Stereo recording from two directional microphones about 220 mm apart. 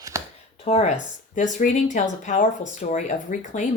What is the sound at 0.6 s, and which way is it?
Speech, 30° left (ahead or behind).